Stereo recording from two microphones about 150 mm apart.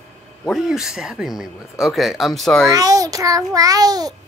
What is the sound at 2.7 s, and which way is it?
A child's voice, 25° right (ahead or behind).